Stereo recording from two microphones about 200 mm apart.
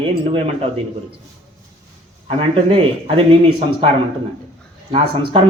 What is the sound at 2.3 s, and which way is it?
Speech, 30° right (ahead or behind).